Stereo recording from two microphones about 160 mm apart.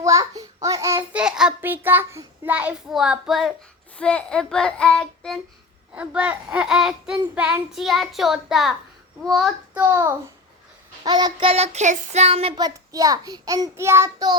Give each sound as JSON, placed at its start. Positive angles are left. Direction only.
{"t": 0.0, "sound": "a sound", "side_deg": -20}
{"t": 1.1, "sound": "child singing", "side_deg": -5}
{"t": 5.9, "sound": "child singing", "side_deg": -5}
{"t": 9.8, "sound": "child singing", "side_deg": -20}
{"t": 12.5, "sound": "a child's voice", "side_deg": -25}